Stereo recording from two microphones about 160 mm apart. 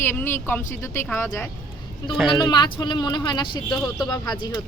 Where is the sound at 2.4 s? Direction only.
30° left (ahead or behind).